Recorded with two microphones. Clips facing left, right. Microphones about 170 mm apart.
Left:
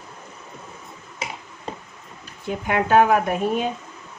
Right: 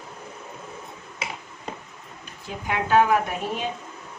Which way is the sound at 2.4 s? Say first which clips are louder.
Left 4 dB; 55° left (ahead or behind).